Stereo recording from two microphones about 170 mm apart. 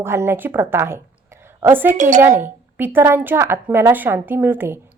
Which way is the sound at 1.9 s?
50° right (ahead or behind).